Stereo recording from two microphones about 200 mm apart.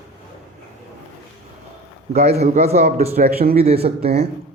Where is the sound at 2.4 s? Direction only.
35° right (ahead or behind).